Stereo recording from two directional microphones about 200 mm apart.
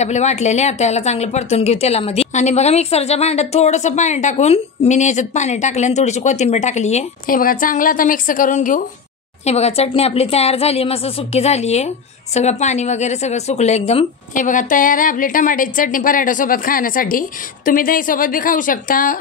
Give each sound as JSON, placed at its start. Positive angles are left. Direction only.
{"t": 0.0, "sound": "a woman's voice", "side_deg": 35}